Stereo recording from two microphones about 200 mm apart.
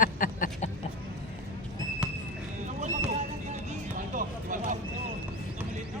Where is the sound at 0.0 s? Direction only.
40° left (ahead or behind).